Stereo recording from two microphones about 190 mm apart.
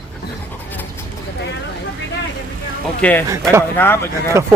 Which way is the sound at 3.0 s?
10° left (ahead or behind).